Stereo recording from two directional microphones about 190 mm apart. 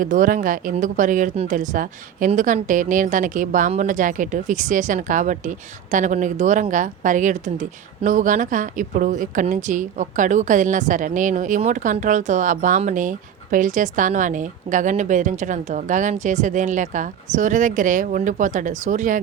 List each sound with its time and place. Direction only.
0.0 s a woman's voice: 45° right (ahead or behind)